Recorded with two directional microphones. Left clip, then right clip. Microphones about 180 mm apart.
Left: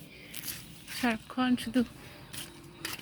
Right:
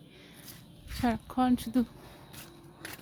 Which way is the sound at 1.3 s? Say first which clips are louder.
Right 1 dB; 45° right (ahead or behind).